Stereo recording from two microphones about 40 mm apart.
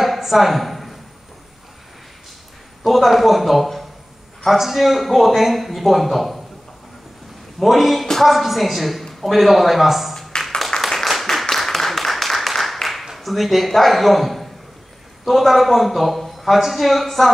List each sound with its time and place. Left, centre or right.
0.0 s a sound: centre
2.8 s a man's voice: centre
7.5 s a man's voice: centre
10.3 s music: left
10.8 s clapping: centre
11.5 s a sound: centre
12.8 s a man's voice: centre